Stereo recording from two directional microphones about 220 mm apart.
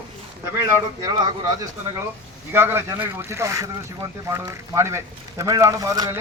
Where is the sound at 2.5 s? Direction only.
10° right (ahead or behind).